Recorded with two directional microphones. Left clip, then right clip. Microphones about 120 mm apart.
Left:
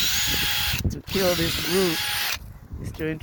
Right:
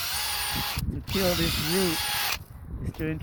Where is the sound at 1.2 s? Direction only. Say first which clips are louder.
Left 3 dB; 15° left (ahead or behind).